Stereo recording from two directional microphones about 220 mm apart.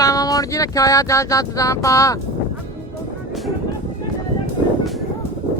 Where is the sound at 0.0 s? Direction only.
15° left (ahead or behind).